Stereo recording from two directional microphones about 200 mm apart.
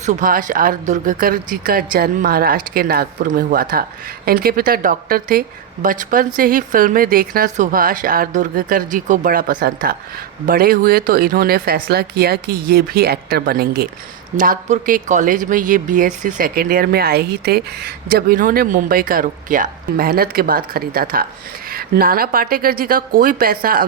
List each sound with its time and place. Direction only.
0.0 s speech: 40° right (ahead or behind)